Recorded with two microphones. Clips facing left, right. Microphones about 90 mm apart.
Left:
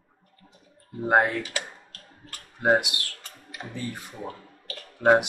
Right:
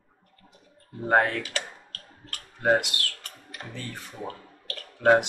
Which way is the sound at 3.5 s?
15° left (ahead or behind).